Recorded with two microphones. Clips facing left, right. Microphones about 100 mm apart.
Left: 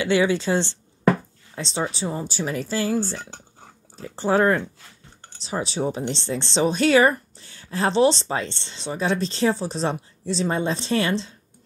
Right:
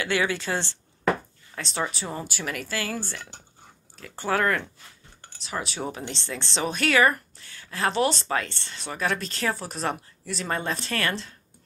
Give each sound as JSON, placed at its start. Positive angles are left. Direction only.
{"t": 0.0, "sound": "speech", "side_deg": 25}